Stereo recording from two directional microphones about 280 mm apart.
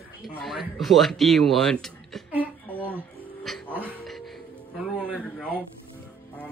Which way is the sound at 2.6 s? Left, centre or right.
Centre.